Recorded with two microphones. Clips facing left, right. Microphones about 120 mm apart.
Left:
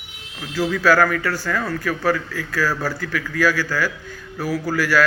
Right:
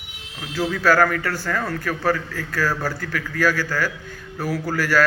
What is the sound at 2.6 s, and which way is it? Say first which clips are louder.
Speech: left 1 dB; 20° right (ahead or behind).